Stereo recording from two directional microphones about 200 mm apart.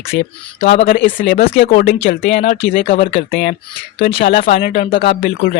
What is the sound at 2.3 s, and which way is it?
Speech, 30° left (ahead or behind).